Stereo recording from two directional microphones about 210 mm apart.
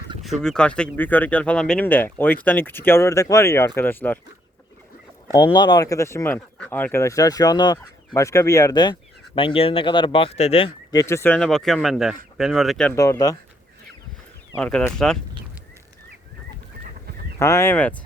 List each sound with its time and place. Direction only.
0.2 s speech: centre (ahead or behind)
5.3 s speech: 20° left (ahead or behind)
10.9 s speech: 15° left (ahead or behind)
13.0 s speech: 15° left (ahead or behind)
14.5 s speech: 5° left (ahead or behind)
17.4 s speech: 10° left (ahead or behind)